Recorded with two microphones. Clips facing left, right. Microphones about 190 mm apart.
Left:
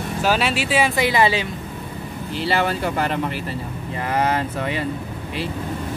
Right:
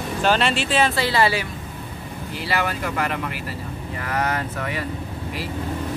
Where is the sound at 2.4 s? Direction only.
30° left (ahead or behind).